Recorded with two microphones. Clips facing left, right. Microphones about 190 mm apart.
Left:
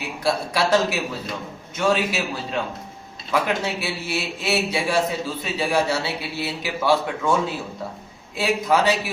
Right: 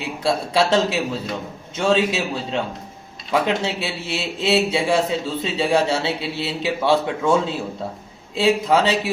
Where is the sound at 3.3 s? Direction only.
25° right (ahead or behind).